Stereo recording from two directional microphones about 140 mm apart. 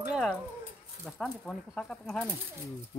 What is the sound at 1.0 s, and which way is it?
Speech, 5° left (ahead or behind).